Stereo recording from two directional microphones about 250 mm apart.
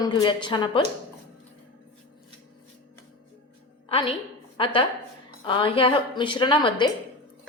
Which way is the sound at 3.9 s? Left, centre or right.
Left.